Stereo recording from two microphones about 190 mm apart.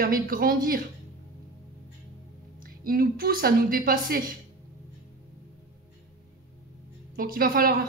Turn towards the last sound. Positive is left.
turn(degrees=-50)  # may be behind; listen again after turning